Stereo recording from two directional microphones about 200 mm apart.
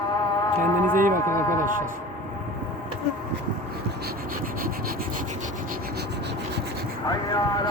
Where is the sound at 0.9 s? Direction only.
45° right (ahead or behind).